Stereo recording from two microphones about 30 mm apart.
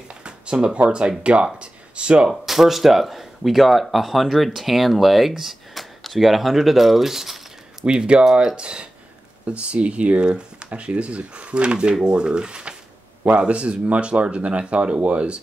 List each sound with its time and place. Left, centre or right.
0.1 s a sound: right
0.8 s speech: right
2.2 s speech: centre
7.8 s speech: right
8.5 s speech: right